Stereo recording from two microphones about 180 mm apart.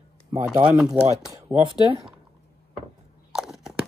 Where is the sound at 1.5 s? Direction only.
15° right (ahead or behind).